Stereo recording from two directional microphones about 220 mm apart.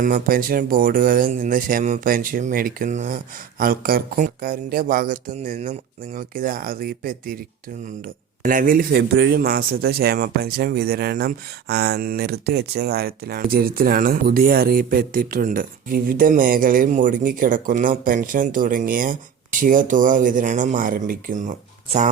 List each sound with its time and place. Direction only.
0.0 s a man's voice: 40° right (ahead or behind)